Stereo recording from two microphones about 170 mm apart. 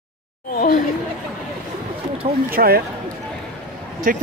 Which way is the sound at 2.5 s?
65° right (ahead or behind).